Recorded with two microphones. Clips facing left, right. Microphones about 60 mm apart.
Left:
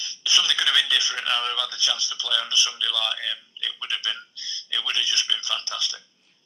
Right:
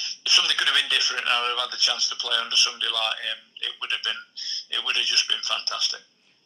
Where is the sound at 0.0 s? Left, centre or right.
Right.